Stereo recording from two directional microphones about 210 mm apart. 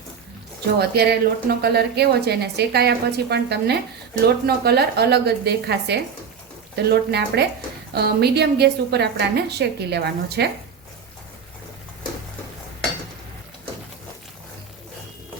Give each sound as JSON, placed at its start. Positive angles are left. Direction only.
{"t": 0.8, "sound": "a woman's voice", "side_deg": -50}